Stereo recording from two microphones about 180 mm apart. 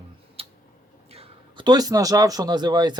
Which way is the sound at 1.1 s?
30° right (ahead or behind).